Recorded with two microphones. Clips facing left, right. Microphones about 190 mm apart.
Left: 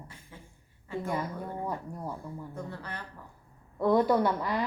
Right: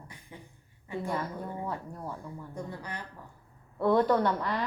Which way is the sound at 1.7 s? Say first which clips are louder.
Left 1 dB; 10° left (ahead or behind).